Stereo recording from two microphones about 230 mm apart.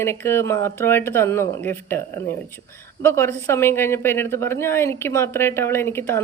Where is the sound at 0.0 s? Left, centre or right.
Centre.